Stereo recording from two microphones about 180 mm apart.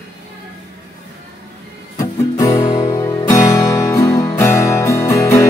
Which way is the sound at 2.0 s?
20° left (ahead or behind).